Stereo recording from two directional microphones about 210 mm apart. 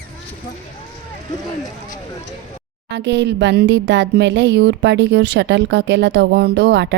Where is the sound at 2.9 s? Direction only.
60° right (ahead or behind).